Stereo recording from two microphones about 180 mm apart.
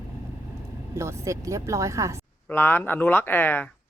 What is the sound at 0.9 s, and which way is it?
Speech, 15° right (ahead or behind).